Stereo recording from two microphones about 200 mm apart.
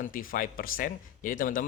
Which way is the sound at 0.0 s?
45° left (ahead or behind).